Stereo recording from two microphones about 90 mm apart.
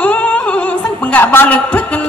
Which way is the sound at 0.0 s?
15° left (ahead or behind).